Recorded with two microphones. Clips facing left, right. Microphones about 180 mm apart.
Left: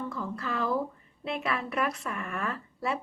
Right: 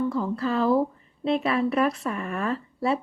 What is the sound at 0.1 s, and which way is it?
Speech, 30° right (ahead or behind).